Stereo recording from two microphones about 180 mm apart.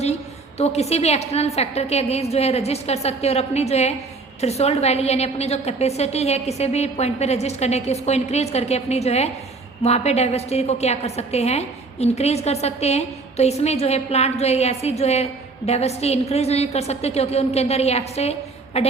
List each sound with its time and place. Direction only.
0.6 s a woman's voice: 35° left (ahead or behind)